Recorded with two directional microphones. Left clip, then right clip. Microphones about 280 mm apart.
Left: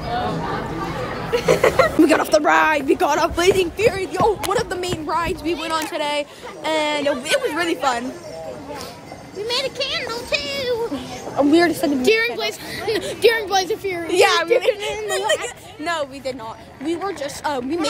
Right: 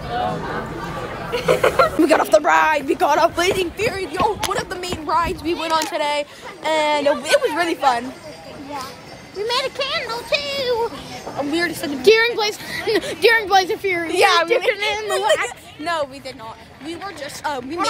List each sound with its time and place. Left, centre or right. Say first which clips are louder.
1.3 s speech: left 1 dB; centre
5.1 s speech: right 4 dB; centre
9.5 s speech: right 1 dB; centre
11.3 s a woman's voice: left 6 dB; left
12.1 s a woman's voice: right 6 dB; centre
14.0 s speech: even; centre
14.7 s a woman's voice: right 1 dB; right
15.8 s speech: right 1 dB; centre
16.8 s a woman's voice: left 6 dB; left
17.4 s speech: even; centre